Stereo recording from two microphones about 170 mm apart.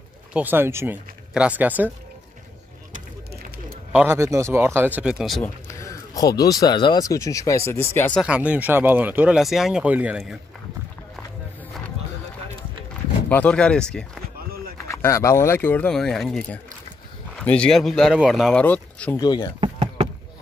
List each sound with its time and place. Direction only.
0.3 s speech: 10° right (ahead or behind)
3.9 s speech: 15° right (ahead or behind)
5.4 s speech: 15° left (ahead or behind)
8.2 s speech: 5° right (ahead or behind)
13.3 s speech: 10° left (ahead or behind)
14.9 s speech: 15° left (ahead or behind)
19.1 s speech: 25° left (ahead or behind)
19.6 s a sound: 35° right (ahead or behind)